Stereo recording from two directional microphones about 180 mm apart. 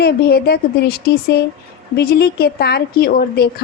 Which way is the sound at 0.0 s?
60° left (ahead or behind).